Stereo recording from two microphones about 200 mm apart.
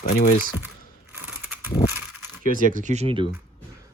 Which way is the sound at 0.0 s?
45° left (ahead or behind).